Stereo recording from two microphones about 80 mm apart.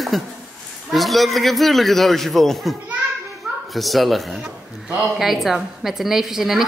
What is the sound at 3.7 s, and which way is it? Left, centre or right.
A man's voice, centre.